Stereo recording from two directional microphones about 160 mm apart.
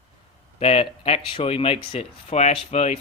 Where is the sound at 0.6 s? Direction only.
40° left (ahead or behind).